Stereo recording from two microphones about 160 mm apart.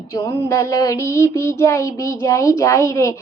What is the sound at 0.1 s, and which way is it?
A woman's voice, 20° left (ahead or behind).